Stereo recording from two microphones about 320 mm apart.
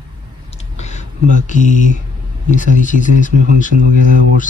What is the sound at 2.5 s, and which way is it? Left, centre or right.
Speech, left.